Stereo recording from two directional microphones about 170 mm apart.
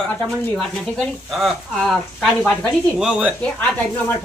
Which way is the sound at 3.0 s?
5° right (ahead or behind).